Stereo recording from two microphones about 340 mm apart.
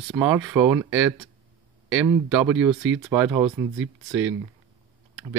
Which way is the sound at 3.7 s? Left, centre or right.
Right.